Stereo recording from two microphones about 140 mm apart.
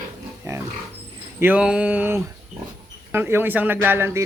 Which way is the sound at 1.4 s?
10° right (ahead or behind).